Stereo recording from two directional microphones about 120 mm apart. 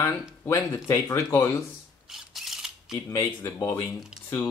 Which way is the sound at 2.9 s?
25° left (ahead or behind).